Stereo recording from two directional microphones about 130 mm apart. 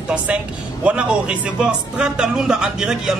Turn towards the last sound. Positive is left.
turn(degrees=-5)  # may be behind; listen again after turning